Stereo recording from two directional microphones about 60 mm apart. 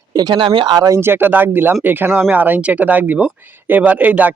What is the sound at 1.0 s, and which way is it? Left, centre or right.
Speech, right.